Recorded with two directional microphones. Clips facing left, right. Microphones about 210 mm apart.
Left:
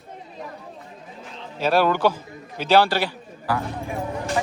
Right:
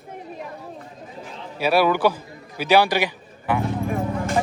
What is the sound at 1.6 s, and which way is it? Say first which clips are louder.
A man's voice: right 1 dB; 10° right (ahead or behind).